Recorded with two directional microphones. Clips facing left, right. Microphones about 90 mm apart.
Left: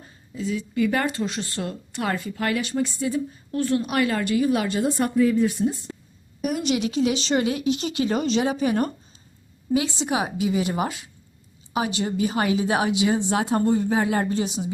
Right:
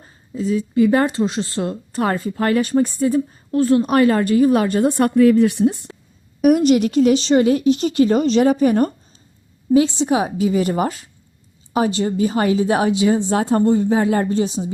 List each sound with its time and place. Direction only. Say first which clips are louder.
0.0 s speech: right 6 dB; 35° right (ahead or behind)
3.5 s speech: right 8 dB; 35° right (ahead or behind); by 5.8 s 65° right (ahead or behind)
6.6 s a woman's voice: right 8 dB; 45° right (ahead or behind)